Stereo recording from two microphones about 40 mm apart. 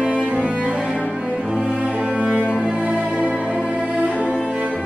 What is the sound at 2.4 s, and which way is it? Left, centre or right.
Cello, left.